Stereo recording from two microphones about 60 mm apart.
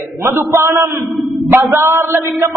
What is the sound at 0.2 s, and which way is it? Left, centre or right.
Speech, right.